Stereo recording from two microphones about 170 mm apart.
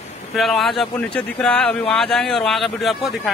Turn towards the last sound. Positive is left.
turn(degrees=0)  # may be behind; listen again after turning